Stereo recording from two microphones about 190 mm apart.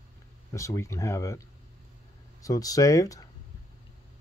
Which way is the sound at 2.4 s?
20° left (ahead or behind).